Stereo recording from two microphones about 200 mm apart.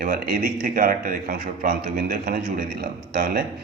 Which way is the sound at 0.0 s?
45° right (ahead or behind).